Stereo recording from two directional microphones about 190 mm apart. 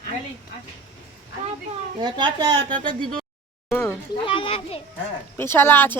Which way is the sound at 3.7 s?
15° left (ahead or behind).